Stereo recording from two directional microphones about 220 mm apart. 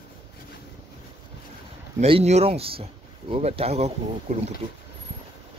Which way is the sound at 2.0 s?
30° right (ahead or behind).